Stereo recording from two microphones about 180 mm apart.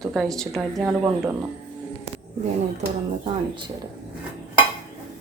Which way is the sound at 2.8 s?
35° right (ahead or behind).